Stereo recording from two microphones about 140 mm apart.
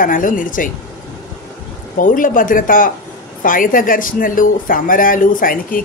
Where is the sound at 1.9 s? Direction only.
70° left (ahead or behind).